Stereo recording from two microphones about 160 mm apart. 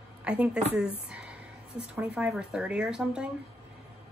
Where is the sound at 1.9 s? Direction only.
5° right (ahead or behind).